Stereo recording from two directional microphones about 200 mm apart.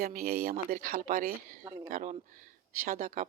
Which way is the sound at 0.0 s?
45° right (ahead or behind).